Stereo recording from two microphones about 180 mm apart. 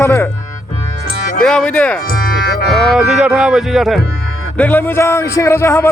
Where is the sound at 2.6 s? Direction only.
Centre (ahead or behind).